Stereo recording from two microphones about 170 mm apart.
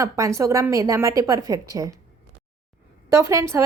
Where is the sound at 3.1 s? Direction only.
15° right (ahead or behind).